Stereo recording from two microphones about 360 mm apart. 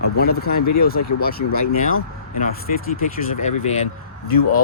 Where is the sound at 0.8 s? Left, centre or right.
Left.